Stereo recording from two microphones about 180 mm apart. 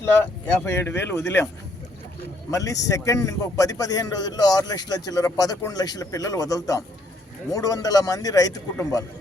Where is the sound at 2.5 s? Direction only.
20° left (ahead or behind).